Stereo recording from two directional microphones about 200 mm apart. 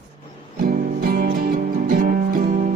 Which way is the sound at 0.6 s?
45° right (ahead or behind).